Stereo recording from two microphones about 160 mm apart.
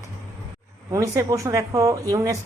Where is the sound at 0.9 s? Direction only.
20° right (ahead or behind).